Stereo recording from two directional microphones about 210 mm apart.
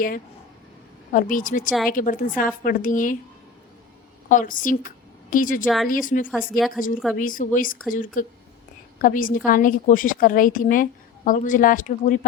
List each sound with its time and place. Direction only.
1.1 s a woman's voice: 40° left (ahead or behind)
4.3 s a woman's voice: 40° left (ahead or behind)
5.6 s a woman's voice: centre (ahead or behind)
5.9 s a woman's voice: 40° left (ahead or behind)